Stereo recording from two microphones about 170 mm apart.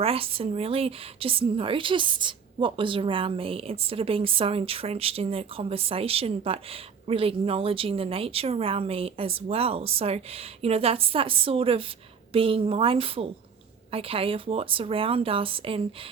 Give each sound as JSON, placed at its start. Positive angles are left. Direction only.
{"t": 0.0, "sound": "speech", "side_deg": -35}